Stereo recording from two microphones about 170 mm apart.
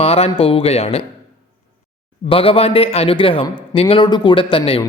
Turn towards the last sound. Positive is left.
turn(degrees=30)  # may be behind; listen again after turning